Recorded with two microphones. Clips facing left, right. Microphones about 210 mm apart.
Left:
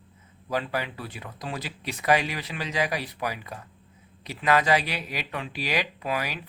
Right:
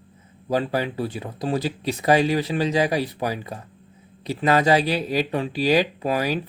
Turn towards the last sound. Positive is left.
turn(degrees=-30)  # may be behind; listen again after turning